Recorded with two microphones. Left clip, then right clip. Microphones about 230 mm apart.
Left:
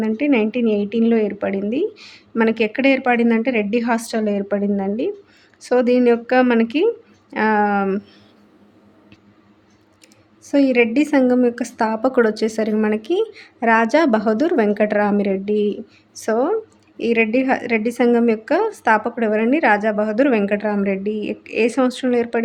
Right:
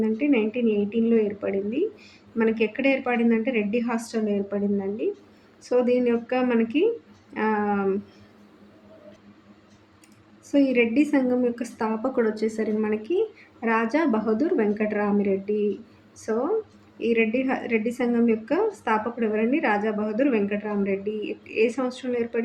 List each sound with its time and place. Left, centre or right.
0.0 s a woman's voice: left
10.4 s a woman's voice: left